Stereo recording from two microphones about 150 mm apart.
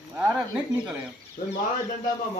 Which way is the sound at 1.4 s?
55° left (ahead or behind).